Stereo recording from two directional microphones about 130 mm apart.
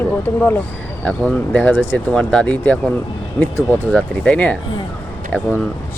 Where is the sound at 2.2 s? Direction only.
5° left (ahead or behind).